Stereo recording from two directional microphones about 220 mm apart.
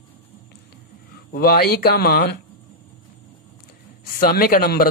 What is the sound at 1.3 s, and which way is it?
Speech, 45° left (ahead or behind).